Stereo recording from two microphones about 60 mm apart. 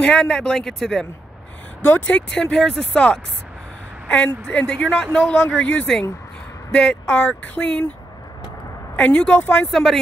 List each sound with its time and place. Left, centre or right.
0.0 s speech: centre
1.8 s speech: left
6.7 s speech: centre
8.9 s speech: left
9.7 s speech: centre